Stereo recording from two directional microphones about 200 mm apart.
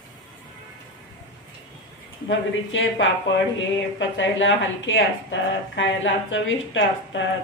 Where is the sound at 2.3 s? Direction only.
65° left (ahead or behind).